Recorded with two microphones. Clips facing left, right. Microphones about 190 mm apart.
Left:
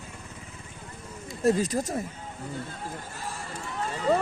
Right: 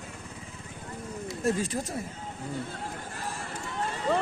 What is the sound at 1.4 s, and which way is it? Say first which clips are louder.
Speech: left 5 dB; 40° left (ahead or behind).